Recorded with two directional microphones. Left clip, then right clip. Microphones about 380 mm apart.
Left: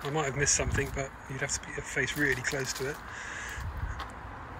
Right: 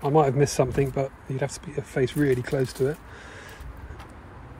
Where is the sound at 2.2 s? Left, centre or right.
Right.